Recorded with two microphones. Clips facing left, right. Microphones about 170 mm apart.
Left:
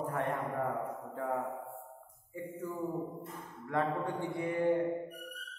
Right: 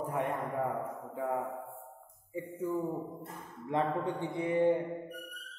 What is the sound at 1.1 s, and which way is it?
Speech, 10° right (ahead or behind).